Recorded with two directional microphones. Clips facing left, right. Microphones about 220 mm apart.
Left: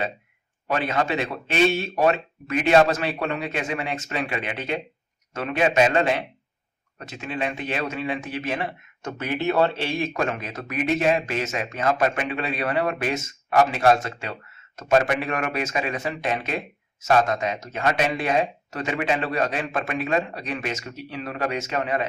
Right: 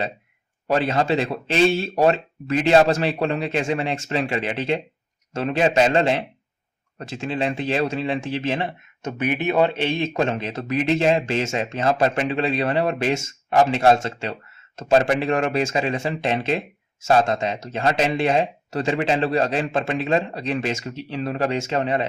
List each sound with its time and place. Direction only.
0.7 s speech: 30° right (ahead or behind)